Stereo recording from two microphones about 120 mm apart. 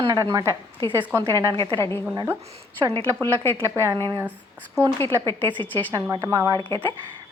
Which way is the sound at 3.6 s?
25° right (ahead or behind).